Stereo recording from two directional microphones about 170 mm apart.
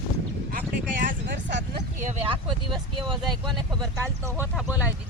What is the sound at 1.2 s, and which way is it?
Speech, 90° right.